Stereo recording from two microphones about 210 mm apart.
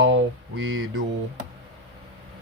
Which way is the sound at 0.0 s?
65° right (ahead or behind).